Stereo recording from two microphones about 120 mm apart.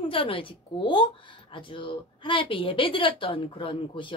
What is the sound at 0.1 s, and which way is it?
Speech, 45° left (ahead or behind).